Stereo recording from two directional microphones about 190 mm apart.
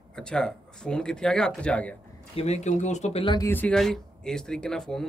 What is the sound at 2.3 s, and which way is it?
Speech, 35° left (ahead or behind).